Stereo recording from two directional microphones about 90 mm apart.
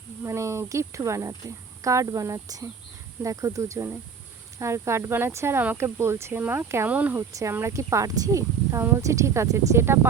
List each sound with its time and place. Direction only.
0.2 s speech: 30° right (ahead or behind)
7.2 s speech: 35° right (ahead or behind)